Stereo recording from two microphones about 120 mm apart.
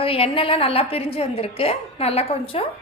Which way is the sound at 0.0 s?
50° left (ahead or behind).